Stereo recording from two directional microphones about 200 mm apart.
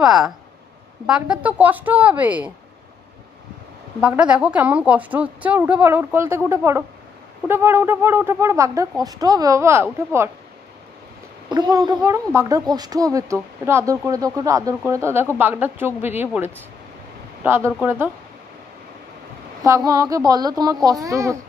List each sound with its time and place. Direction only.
0.0 s a woman's voice: 5° right (ahead or behind)
4.0 s a woman's voice: 5° right (ahead or behind)
11.4 s a child's voice: 20° right (ahead or behind)
19.6 s a woman's voice: 15° right (ahead or behind)